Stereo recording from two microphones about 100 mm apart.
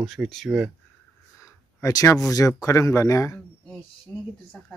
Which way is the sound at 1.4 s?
30° left (ahead or behind).